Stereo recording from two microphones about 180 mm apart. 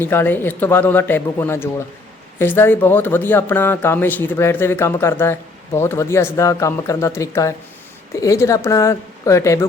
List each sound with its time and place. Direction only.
0.0 s speech: 10° left (ahead or behind)